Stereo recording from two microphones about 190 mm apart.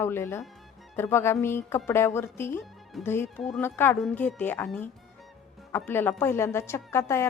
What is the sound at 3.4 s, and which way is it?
A woman's voice, centre (ahead or behind).